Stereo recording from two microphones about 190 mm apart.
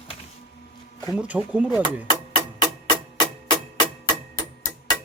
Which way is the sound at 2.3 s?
25° left (ahead or behind).